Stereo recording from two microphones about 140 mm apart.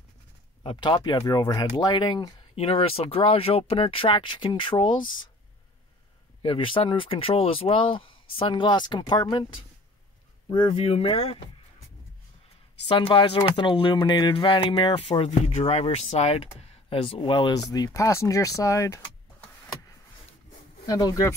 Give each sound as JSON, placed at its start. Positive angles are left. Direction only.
{"t": 0.7, "sound": "speech", "side_deg": 35}
{"t": 2.5, "sound": "speech", "side_deg": 40}
{"t": 6.4, "sound": "speech", "side_deg": 40}
{"t": 12.8, "sound": "speech", "side_deg": 35}
{"t": 20.8, "sound": "speech", "side_deg": 25}